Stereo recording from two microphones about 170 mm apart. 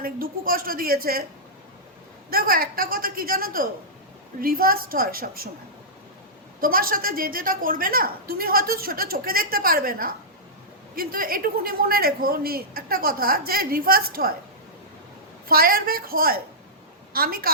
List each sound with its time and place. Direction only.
0.0 s a woman's voice: 60° right (ahead or behind)
2.3 s a woman's voice: 60° right (ahead or behind)
6.6 s a woman's voice: 60° right (ahead or behind)
15.4 s a woman's voice: 60° right (ahead or behind)